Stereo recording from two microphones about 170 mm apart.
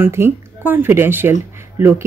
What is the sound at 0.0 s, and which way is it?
Speech, 15° right (ahead or behind).